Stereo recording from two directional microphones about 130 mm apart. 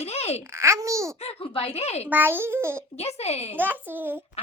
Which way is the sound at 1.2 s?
50° left (ahead or behind).